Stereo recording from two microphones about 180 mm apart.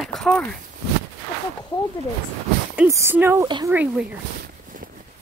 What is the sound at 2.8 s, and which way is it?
Speech, 15° right (ahead or behind).